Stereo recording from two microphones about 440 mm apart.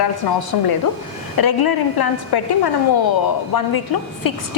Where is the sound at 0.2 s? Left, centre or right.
Left.